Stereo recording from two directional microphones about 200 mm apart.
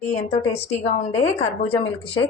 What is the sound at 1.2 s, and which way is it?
A woman's voice, 30° left (ahead or behind).